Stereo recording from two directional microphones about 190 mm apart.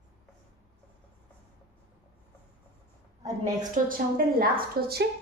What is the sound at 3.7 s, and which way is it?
A woman's voice, 50° right (ahead or behind).